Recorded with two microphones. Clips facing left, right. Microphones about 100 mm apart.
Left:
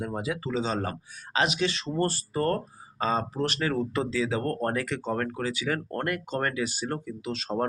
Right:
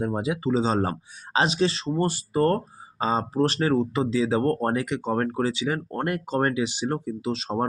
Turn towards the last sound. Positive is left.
turn(degrees=-25)  # may be behind; listen again after turning